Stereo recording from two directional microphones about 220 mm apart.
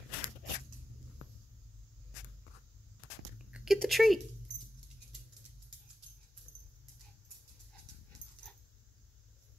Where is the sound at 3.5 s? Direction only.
5° right (ahead or behind).